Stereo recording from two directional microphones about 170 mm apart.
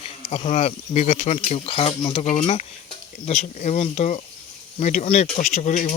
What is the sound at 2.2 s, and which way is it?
Speech, 40° left (ahead or behind).